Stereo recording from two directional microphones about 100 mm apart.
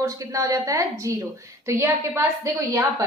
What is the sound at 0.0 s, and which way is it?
A woman's voice, 35° right (ahead or behind).